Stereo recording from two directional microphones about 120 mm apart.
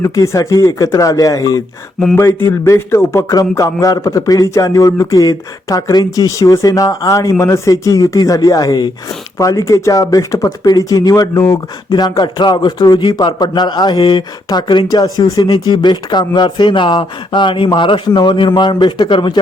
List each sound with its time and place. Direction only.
0.0 s speech: 25° left (ahead or behind)